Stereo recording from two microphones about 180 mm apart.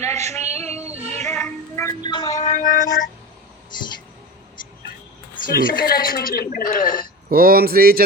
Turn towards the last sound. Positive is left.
turn(degrees=-55)  # may be behind; listen again after turning